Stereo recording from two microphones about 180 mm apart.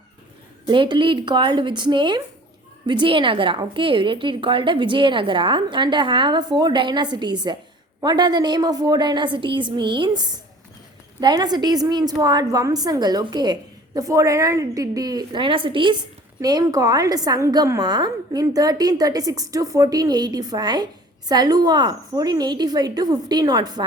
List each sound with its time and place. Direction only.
0.7 s a woman's voice: 25° right (ahead or behind)